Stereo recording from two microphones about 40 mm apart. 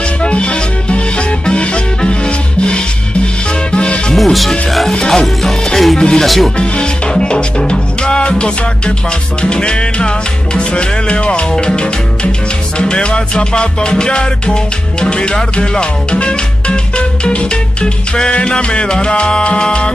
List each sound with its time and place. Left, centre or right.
0.2 s music: left
4.2 s music: centre
4.9 s music: centre
5.2 s music: centre
5.9 s music: left
6.2 s speech: centre
6.6 s music: left